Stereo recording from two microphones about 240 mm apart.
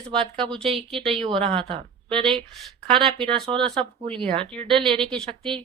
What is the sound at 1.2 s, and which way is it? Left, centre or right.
Speech, right.